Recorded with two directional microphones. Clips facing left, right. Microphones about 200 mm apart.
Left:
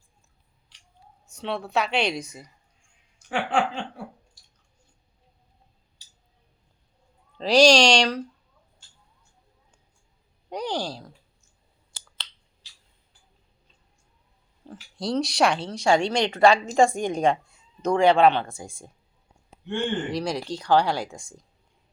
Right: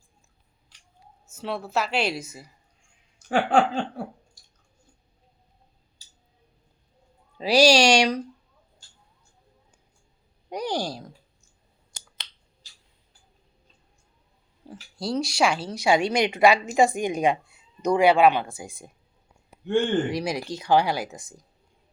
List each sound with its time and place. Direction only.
1.3 s a woman's voice: 5° right (ahead or behind)
3.2 s a sound: 40° right (ahead or behind)
7.3 s speech: 5° right (ahead or behind)
10.5 s speech: 10° right (ahead or behind)
14.7 s a woman's voice: 5° right (ahead or behind)
15.9 s speech: 15° right (ahead or behind)
20.1 s speech: 10° right (ahead or behind)